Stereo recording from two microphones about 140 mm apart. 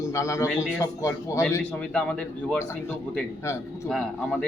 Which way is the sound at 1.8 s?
10° left (ahead or behind).